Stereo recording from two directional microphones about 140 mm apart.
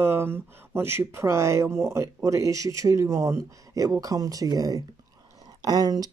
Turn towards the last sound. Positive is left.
turn(degrees=-30)  # may be behind; listen again after turning